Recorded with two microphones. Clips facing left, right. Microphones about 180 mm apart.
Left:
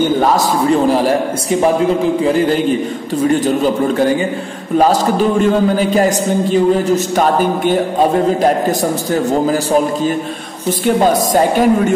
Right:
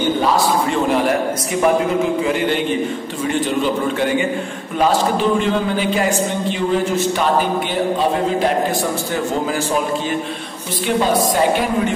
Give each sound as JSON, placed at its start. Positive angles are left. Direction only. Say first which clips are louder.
{"t": 0.7, "sound": "a man's voice", "louder": "left 5 dB", "side_deg": 35}
{"t": 5.4, "sound": "a man's voice", "louder": "left 6 dB", "side_deg": 40}
{"t": 11.0, "sound": "a woman's voice", "louder": "left 2 dB", "side_deg": 45}